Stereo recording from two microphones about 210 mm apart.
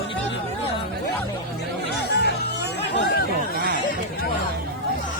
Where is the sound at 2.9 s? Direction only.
50° left (ahead or behind).